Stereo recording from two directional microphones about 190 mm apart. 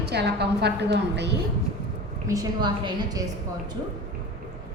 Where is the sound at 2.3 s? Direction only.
20° right (ahead or behind).